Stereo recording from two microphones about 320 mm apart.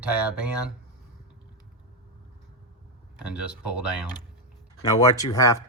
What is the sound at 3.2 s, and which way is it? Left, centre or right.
Speech, centre.